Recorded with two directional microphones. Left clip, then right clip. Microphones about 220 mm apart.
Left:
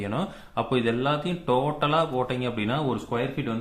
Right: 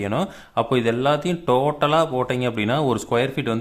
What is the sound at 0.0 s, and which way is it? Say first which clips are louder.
Speech: right 6 dB; 30° right (ahead or behind).